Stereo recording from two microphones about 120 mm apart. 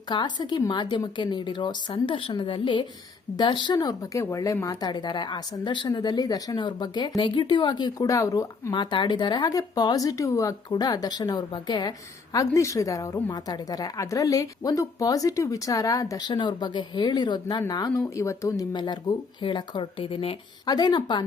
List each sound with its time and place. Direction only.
0.1 s speech: 35° left (ahead or behind)
18.7 s speech: 40° left (ahead or behind)
20.7 s speech: 35° left (ahead or behind)